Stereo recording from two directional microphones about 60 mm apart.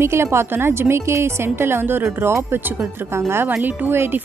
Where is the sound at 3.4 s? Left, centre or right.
Right.